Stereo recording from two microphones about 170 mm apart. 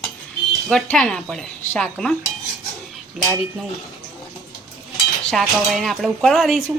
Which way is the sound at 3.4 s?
Centre (ahead or behind).